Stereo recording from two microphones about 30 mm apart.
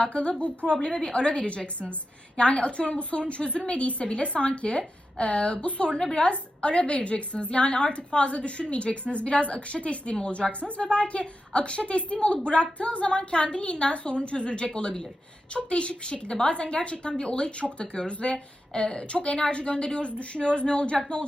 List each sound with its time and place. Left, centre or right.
0.1 s a woman's voice: left
0.8 s a woman's voice: left
5.9 s a woman's voice: centre
6.3 s a woman's voice: left
18.7 s a woman's voice: left
19.1 s a woman's voice: left